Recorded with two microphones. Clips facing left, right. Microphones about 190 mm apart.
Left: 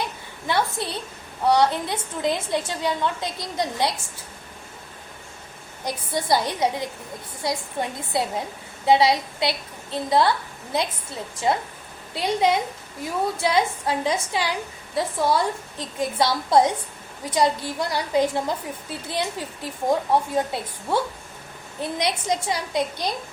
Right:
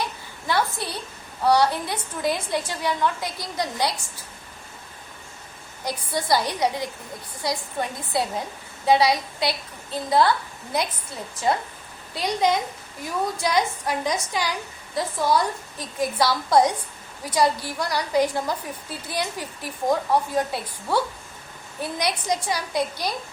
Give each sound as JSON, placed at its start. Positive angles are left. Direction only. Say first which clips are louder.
{"t": 0.4, "sound": "a woman's voice", "louder": "left 1 dB", "side_deg": 20}
{"t": 5.8, "sound": "a woman's voice", "louder": "left 1 dB", "side_deg": 20}
{"t": 12.1, "sound": "a woman's voice", "louder": "left 1 dB", "side_deg": 25}